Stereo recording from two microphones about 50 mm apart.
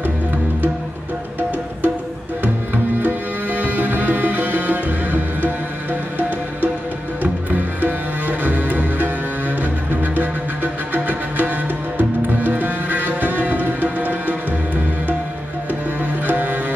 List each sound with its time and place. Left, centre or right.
3.0 s music: right
7.5 s music: right
10.1 s music: right
16.3 s music: right